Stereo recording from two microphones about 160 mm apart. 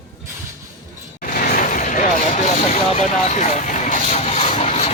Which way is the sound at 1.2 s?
60° left (ahead or behind).